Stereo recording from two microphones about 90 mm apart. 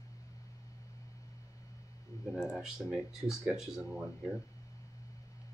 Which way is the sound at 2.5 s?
10° right (ahead or behind).